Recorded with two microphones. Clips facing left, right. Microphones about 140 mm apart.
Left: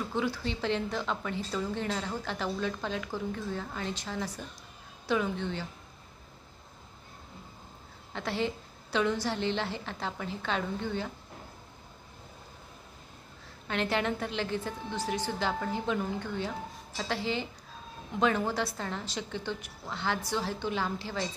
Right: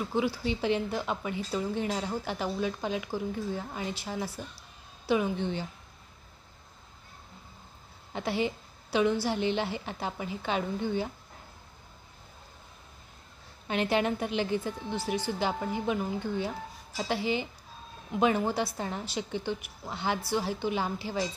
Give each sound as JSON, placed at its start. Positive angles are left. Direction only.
{"t": 0.1, "sound": "a woman's voice", "side_deg": -10}
{"t": 8.1, "sound": "a woman's voice", "side_deg": -15}
{"t": 13.7, "sound": "a woman's voice", "side_deg": -15}